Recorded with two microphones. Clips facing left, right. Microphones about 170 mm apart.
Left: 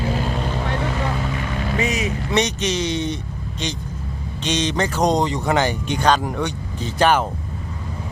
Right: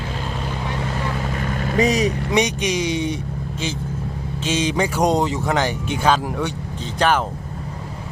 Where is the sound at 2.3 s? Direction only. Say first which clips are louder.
Right 1 dB; 10° right (ahead or behind).